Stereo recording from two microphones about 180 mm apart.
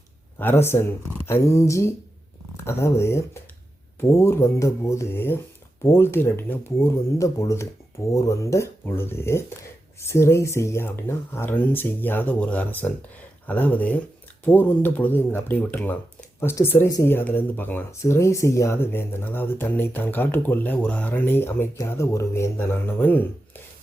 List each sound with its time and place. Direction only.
0.3 s speech: 10° left (ahead or behind)